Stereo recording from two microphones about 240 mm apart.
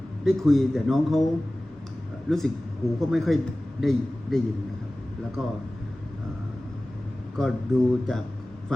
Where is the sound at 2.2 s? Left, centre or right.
Centre.